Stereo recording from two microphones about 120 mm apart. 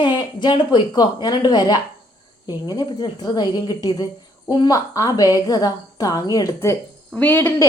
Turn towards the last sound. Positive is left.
turn(degrees=15)  # may be behind; listen again after turning